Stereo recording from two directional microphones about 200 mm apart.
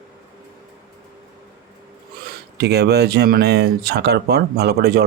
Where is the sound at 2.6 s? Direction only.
55° right (ahead or behind).